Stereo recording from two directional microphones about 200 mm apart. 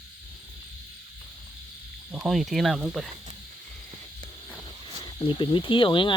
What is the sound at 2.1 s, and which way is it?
Speech, centre (ahead or behind).